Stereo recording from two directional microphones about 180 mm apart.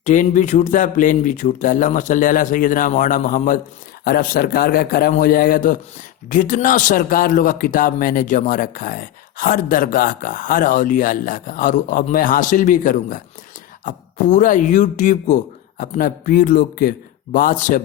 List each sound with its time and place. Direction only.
0.0 s a man's voice: 45° left (ahead or behind)